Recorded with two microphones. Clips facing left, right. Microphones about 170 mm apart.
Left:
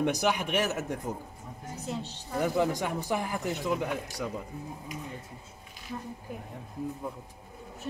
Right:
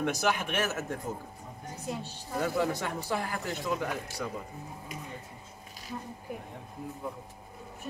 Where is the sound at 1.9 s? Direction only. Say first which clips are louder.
Left 1 dB; 15° right (ahead or behind).